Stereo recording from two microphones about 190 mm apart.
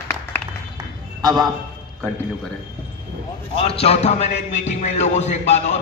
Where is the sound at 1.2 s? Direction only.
20° right (ahead or behind).